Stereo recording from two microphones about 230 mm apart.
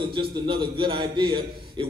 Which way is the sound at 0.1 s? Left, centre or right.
Right.